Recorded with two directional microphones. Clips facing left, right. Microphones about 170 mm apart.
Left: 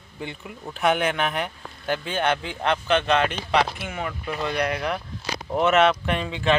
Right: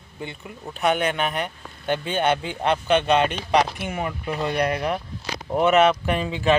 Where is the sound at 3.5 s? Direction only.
45° right (ahead or behind).